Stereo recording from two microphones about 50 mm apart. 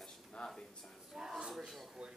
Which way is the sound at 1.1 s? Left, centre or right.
Centre.